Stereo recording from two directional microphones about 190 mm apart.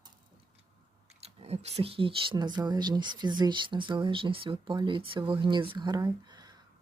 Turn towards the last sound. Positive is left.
turn(degrees=-20)  # may be behind; listen again after turning